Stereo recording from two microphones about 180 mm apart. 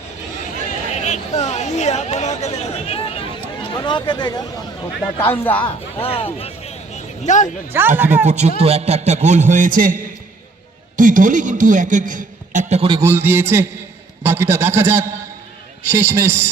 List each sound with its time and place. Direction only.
0.9 s chatter: 40° left (ahead or behind)
3.7 s speech: 25° left (ahead or behind)
5.2 s speech: 10° left (ahead or behind)
6.0 s a sound: 30° left (ahead or behind)
7.7 s a man's voice: 10° right (ahead or behind)
8.3 s a man's voice: 40° right (ahead or behind)
13.0 s a man's voice: 15° right (ahead or behind)